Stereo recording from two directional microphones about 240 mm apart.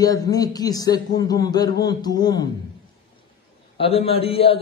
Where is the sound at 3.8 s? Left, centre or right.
Left.